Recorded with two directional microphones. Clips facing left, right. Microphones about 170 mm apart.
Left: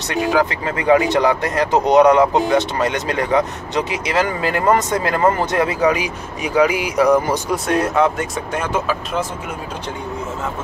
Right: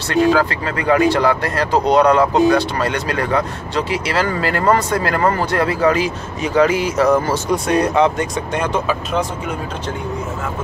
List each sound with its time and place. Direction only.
0.1 s speech: 15° left (ahead or behind)
7.5 s speech: centre (ahead or behind)